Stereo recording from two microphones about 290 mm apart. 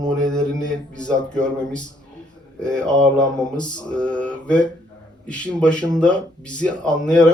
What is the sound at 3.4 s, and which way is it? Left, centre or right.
Mantra, centre.